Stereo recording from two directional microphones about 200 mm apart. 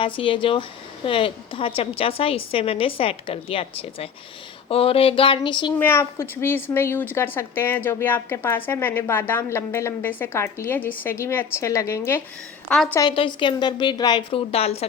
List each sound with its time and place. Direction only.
0.0 s a woman's voice: 25° left (ahead or behind)
5.8 s a woman's voice: 15° left (ahead or behind)
13.0 s a woman's voice: 25° left (ahead or behind)